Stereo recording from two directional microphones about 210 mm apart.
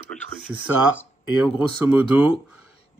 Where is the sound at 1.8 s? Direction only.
5° right (ahead or behind).